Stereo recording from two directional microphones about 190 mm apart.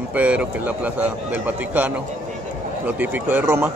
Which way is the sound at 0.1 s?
5° right (ahead or behind).